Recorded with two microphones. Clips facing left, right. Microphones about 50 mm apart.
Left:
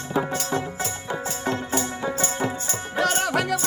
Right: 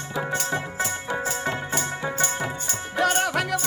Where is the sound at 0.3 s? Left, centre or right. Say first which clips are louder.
Even; centre.